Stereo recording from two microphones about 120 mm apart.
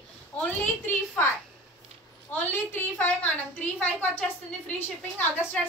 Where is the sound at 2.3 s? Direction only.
15° left (ahead or behind).